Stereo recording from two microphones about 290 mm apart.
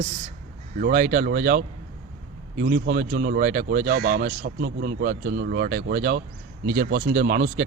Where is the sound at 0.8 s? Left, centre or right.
Right.